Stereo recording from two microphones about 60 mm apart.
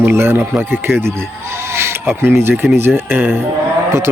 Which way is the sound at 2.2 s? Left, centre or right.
Right.